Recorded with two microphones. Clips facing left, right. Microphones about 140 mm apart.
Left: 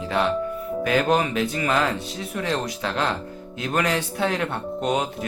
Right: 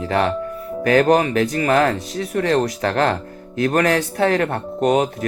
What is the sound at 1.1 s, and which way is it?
Speech, 45° right (ahead or behind).